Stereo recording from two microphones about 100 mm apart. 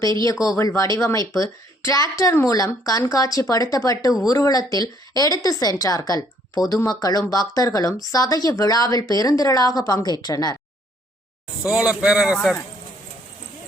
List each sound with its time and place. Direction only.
0.0 s speech: 35° left (ahead or behind)
11.7 s a man's voice: 10° right (ahead or behind)